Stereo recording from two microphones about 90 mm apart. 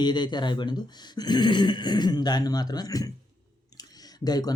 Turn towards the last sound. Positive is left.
turn(degrees=45)  # may be behind; listen again after turning